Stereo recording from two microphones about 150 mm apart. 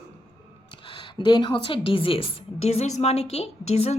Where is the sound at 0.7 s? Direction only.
30° left (ahead or behind).